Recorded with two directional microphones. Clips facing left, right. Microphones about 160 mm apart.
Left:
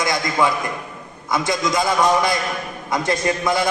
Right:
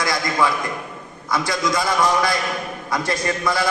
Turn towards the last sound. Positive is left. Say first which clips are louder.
# left 2 dB
turn(degrees=20)  # may be behind; listen again after turning